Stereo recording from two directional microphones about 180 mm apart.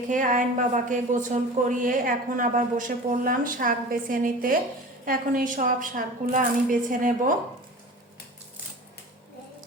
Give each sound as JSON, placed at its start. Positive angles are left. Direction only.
{"t": 0.1, "sound": "a woman's voice", "side_deg": -45}